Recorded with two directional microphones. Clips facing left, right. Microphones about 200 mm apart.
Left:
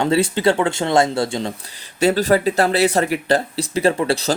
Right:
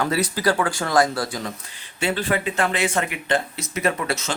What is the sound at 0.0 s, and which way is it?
Speech, 25° left (ahead or behind).